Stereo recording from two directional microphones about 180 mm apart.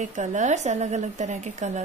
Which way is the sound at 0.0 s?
40° right (ahead or behind).